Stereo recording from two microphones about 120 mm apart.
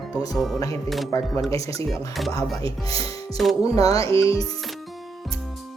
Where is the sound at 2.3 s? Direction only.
30° left (ahead or behind).